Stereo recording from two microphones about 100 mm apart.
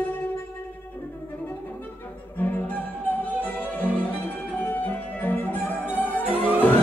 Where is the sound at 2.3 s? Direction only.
15° left (ahead or behind).